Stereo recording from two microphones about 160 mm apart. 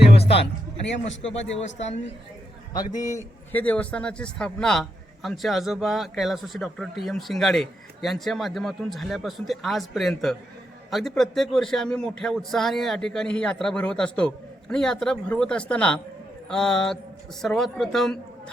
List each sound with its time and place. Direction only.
1.3 s speech: 40° left (ahead or behind)
2.7 s a man's voice: 25° left (ahead or behind); by 18.5 s 5° left (ahead or behind)